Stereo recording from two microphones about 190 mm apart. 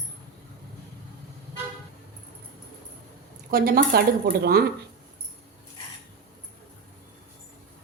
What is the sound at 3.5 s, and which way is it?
Speech, 50° right (ahead or behind).